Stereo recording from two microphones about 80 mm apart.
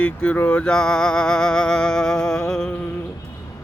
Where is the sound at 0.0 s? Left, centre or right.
Centre.